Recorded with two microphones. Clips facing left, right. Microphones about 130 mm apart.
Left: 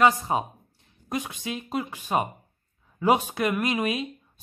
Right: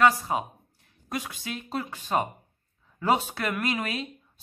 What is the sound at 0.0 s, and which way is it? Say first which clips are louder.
Speech: left 1 dB; 30° left (ahead or behind).